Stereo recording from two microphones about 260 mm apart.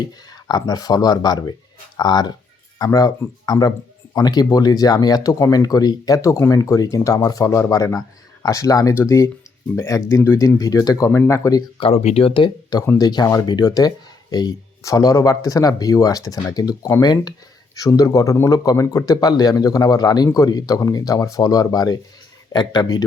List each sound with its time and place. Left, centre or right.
0.3 s speech: centre